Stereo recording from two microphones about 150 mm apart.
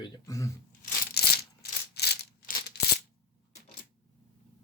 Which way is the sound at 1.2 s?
90° left.